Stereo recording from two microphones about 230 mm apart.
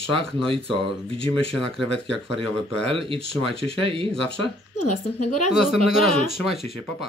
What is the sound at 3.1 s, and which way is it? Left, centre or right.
Speech, right.